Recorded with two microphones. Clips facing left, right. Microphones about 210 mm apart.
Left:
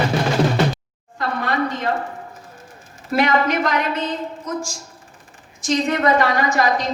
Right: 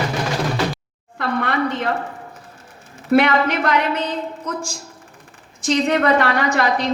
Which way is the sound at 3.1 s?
60° right (ahead or behind).